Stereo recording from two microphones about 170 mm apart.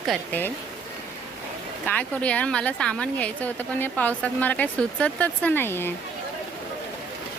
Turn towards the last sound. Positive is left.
turn(degrees=15)  # may be behind; listen again after turning